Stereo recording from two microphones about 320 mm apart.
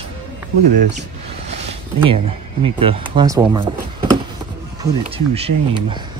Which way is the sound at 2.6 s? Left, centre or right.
Centre.